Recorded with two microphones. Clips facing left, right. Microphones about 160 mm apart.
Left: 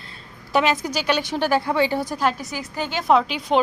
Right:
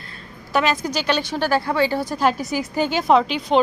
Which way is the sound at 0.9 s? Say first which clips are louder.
Even; 10° left (ahead or behind).